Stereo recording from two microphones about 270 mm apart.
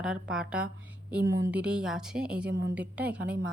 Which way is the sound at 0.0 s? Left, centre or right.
Centre.